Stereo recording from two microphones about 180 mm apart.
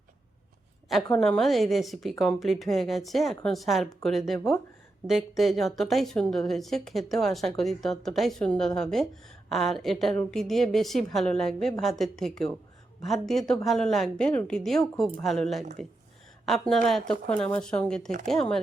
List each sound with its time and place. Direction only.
1.1 s a woman's voice: 5° left (ahead or behind)